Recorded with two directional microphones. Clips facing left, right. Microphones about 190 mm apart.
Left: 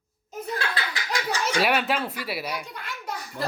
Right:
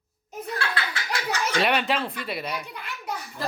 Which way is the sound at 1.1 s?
10° left (ahead or behind).